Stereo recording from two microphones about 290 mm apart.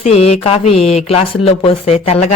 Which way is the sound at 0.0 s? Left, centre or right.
Left.